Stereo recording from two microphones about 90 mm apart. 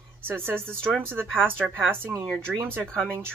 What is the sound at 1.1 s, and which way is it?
Speech, 25° right (ahead or behind).